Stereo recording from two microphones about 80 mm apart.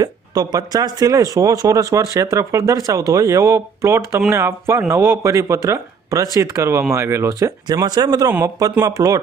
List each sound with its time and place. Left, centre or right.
0.0 s speech: right
7.6 s speech: right
8.8 s speech: right